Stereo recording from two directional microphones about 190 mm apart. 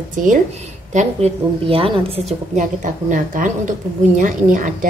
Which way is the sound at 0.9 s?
30° right (ahead or behind).